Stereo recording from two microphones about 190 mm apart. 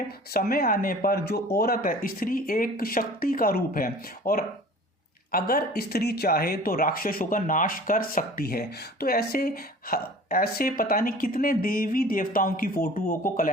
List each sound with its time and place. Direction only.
0.3 s speech: 50° left (ahead or behind)